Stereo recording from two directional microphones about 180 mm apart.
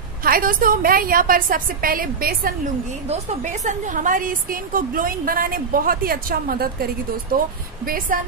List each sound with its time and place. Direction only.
0.2 s a woman's voice: 55° right (ahead or behind)
3.1 s a woman's voice: 40° right (ahead or behind)